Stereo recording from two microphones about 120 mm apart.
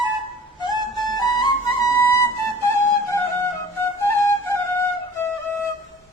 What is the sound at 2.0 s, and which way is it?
Flute, 25° left (ahead or behind).